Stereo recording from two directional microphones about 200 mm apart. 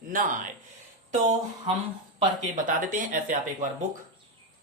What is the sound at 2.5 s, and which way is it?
Speech, 40° right (ahead or behind).